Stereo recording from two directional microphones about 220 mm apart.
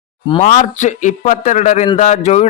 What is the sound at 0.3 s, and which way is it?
Speech, 30° left (ahead or behind).